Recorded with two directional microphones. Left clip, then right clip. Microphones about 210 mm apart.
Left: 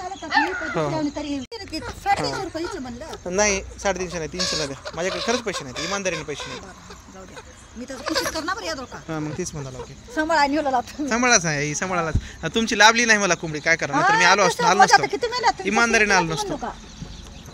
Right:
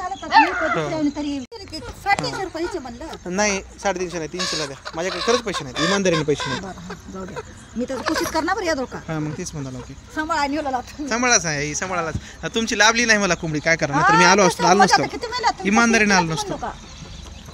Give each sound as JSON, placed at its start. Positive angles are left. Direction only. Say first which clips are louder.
{"t": 0.3, "sound": "a sound", "louder": "right 6 dB", "side_deg": -40}
{"t": 0.7, "sound": "speech", "louder": "right 1 dB", "side_deg": -5}
{"t": 2.0, "sound": "speech", "louder": "right 1 dB", "side_deg": -15}
{"t": 8.3, "sound": "speech", "louder": "right 5 dB", "side_deg": -30}
{"t": 9.0, "sound": "speech", "louder": "right 1 dB", "side_deg": -5}
{"t": 15.0, "sound": "speech", "louder": "left 1 dB", "side_deg": 5}
{"t": 15.6, "sound": "speech", "louder": "right 3 dB", "side_deg": -20}